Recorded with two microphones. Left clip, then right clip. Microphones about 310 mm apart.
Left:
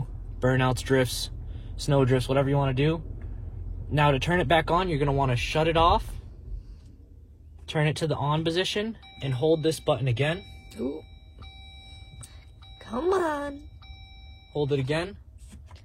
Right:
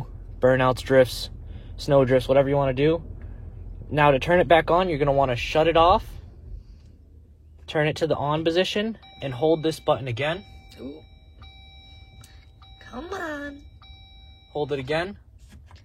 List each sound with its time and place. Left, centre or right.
0.0 s speech: right
7.6 s speech: right
12.7 s a woman's voice: centre
14.5 s speech: right